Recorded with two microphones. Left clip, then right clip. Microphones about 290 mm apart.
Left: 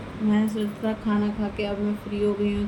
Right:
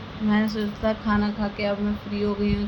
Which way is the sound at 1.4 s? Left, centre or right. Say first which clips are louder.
Right 2 dB; right.